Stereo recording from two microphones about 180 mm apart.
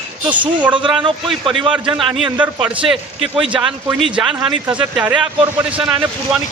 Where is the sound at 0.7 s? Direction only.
25° right (ahead or behind).